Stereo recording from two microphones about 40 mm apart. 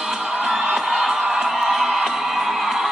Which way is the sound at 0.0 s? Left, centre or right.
Centre.